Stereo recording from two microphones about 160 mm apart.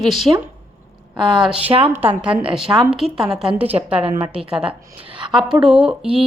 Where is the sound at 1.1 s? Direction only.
25° right (ahead or behind).